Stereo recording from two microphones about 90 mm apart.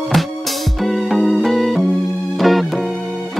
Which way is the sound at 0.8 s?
Centre (ahead or behind).